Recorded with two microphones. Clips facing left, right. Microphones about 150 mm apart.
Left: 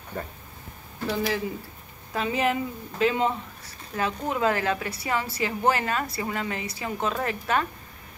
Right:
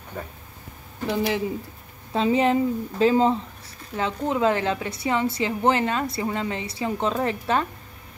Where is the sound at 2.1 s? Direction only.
30° right (ahead or behind).